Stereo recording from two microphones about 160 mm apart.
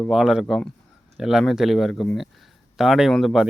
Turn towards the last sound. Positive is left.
turn(degrees=0)  # may be behind; listen again after turning